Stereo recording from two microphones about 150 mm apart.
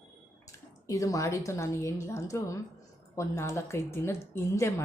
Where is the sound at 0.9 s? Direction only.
20° left (ahead or behind).